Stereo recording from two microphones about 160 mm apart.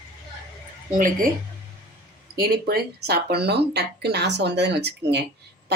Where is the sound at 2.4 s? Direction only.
75° right (ahead or behind).